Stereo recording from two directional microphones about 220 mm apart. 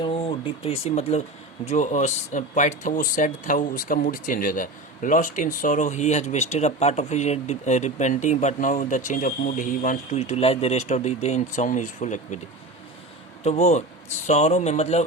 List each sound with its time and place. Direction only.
0.0 s speech: 25° left (ahead or behind)
13.4 s speech: 30° left (ahead or behind)